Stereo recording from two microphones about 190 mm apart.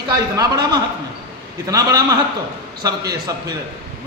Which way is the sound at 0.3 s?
20° right (ahead or behind).